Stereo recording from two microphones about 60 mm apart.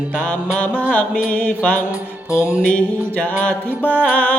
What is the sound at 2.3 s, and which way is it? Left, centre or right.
Music, centre.